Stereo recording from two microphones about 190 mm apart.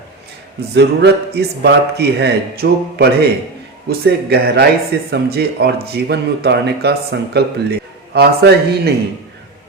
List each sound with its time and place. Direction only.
0.7 s speech: 60° right (ahead or behind)